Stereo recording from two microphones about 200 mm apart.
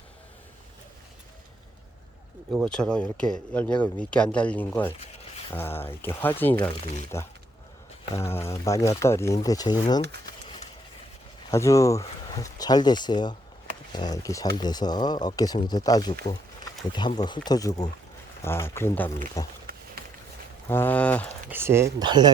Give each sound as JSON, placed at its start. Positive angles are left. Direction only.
{"t": 2.5, "sound": "speech", "side_deg": 0}
{"t": 11.5, "sound": "speech", "side_deg": 15}
{"t": 17.2, "sound": "speech", "side_deg": 20}
{"t": 20.0, "sound": "a sound", "side_deg": -50}
{"t": 20.7, "sound": "speech", "side_deg": 10}
{"t": 21.5, "sound": "speech", "side_deg": -10}